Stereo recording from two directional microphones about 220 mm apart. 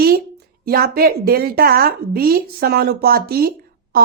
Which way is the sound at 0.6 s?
45° right (ahead or behind).